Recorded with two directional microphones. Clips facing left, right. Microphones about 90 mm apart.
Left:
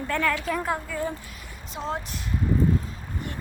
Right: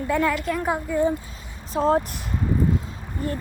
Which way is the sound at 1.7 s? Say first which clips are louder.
Right 11 dB; 40° right (ahead or behind).